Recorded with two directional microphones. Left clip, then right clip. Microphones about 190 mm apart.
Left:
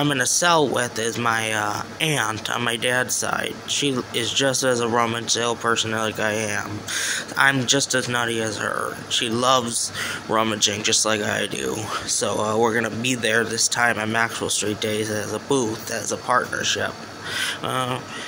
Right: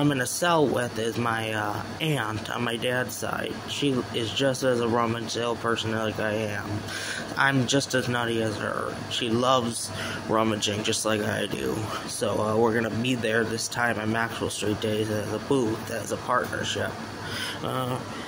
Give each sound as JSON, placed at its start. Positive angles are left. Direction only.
{"t": 0.0, "sound": "speech", "side_deg": 5}